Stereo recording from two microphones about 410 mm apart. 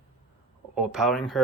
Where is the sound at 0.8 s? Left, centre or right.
Centre.